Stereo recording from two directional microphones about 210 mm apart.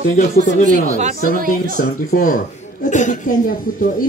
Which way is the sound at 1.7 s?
40° left (ahead or behind).